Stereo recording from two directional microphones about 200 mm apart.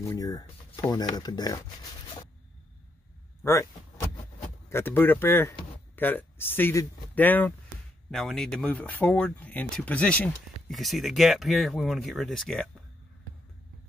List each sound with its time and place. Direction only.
0.0 s speech: 15° left (ahead or behind)
4.6 s speech: 10° left (ahead or behind)